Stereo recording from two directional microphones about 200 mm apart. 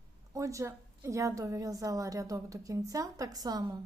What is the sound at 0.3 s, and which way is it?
A woman's voice, 15° right (ahead or behind).